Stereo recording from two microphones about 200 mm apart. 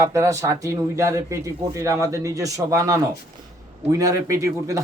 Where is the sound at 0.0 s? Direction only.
15° right (ahead or behind).